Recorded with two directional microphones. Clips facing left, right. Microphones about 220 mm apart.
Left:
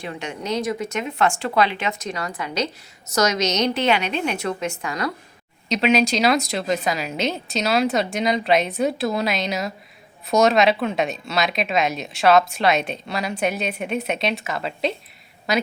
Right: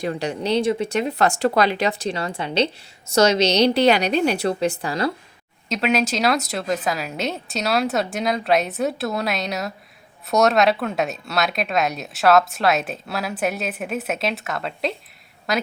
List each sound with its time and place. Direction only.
0.0 s speech: 35° right (ahead or behind)
5.6 s speech: centre (ahead or behind)